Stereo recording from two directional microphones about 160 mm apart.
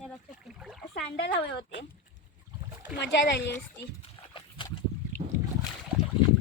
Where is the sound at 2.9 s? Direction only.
90° left.